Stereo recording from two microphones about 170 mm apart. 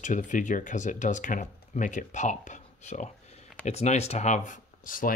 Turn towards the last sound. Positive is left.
turn(degrees=55)  # may be behind; listen again after turning